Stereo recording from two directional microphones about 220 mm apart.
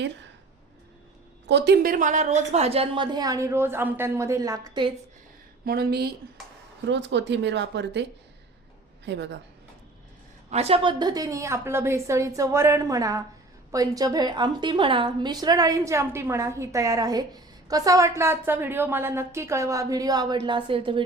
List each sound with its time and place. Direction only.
1.5 s a woman's voice: 50° right (ahead or behind); by 4.9 s 15° right (ahead or behind)
5.6 s speech: 45° right (ahead or behind)
9.0 s speech: 50° right (ahead or behind)
10.5 s a woman's voice: 30° right (ahead or behind)